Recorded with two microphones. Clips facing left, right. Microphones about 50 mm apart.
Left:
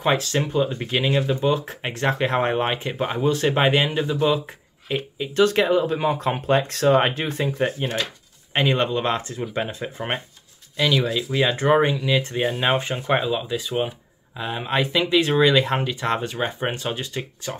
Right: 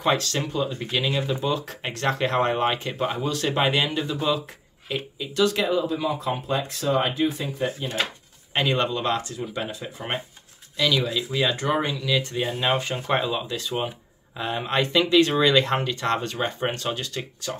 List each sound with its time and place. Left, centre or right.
0.0 s speech: centre
5.2 s speech: left
8.5 s speech: left